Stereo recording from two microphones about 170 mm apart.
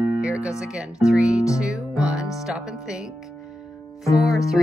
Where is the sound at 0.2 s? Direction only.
5° right (ahead or behind).